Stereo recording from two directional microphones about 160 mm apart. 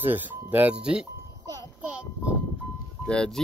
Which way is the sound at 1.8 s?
10° right (ahead or behind).